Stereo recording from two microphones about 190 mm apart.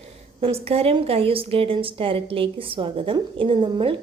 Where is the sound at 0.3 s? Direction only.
30° right (ahead or behind).